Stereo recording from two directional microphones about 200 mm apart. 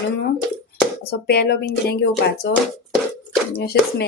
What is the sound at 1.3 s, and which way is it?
Speech, 50° left (ahead or behind).